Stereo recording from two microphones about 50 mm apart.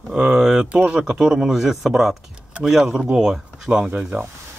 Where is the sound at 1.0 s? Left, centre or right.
Centre.